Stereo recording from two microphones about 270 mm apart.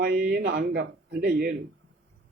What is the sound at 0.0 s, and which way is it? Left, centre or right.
A man's voice, right.